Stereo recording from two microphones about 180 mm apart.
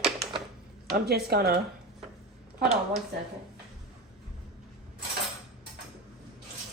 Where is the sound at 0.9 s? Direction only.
60° right (ahead or behind).